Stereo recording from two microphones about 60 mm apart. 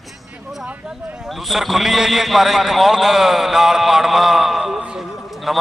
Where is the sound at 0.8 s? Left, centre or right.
Centre.